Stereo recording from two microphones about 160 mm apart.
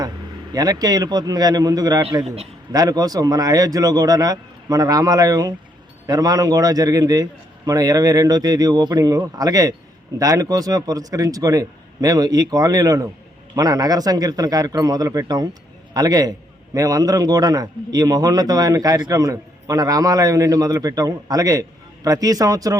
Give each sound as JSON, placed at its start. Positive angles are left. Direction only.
{"t": 0.5, "sound": "a man's voice", "side_deg": -25}